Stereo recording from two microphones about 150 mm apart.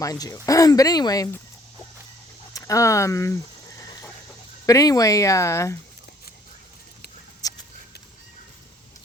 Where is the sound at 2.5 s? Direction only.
20° left (ahead or behind).